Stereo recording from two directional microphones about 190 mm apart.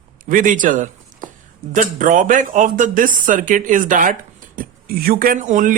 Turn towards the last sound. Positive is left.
turn(degrees=-45)  # may be behind; listen again after turning